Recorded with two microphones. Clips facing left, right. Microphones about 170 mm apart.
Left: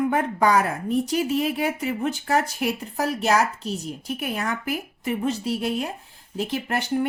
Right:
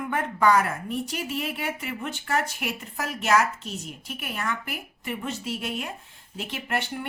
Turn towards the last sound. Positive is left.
turn(degrees=40)  # may be behind; listen again after turning